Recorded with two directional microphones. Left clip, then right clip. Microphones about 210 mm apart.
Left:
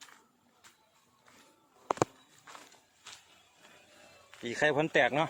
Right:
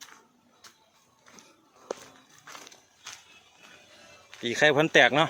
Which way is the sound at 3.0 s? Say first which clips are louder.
Right 6 dB; 10° right (ahead or behind).